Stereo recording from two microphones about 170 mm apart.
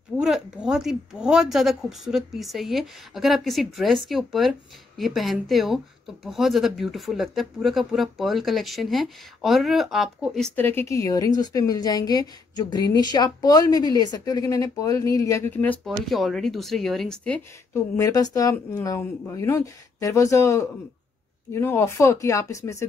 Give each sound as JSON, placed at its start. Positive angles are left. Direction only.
{"t": 0.2, "sound": "speech", "side_deg": -5}